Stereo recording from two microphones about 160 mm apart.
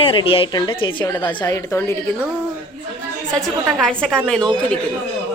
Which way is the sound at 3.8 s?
5° left (ahead or behind).